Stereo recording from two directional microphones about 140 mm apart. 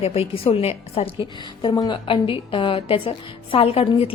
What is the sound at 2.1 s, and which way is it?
A woman's voice, 40° left (ahead or behind).